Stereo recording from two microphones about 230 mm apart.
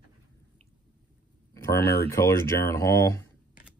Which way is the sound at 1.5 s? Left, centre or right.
Centre.